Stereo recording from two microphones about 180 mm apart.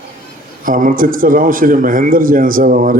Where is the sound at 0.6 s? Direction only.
50° right (ahead or behind).